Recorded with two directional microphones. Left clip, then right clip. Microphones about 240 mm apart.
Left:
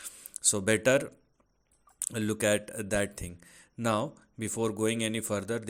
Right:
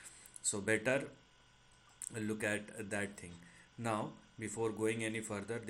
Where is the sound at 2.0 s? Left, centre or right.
Left.